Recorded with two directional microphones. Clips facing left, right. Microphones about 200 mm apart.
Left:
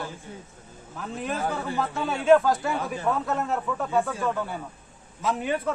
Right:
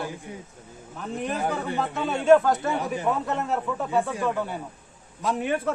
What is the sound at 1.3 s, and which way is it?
Speech, 15° right (ahead or behind).